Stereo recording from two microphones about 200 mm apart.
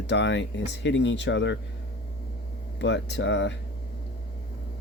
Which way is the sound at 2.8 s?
60° left (ahead or behind).